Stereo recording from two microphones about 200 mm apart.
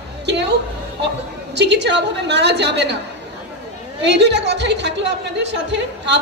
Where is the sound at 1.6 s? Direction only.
60° right (ahead or behind).